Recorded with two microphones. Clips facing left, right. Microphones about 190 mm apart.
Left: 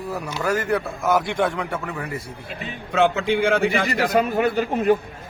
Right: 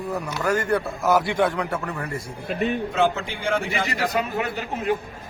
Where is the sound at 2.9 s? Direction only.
65° left (ahead or behind).